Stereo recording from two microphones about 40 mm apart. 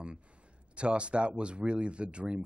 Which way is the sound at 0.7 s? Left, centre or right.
Right.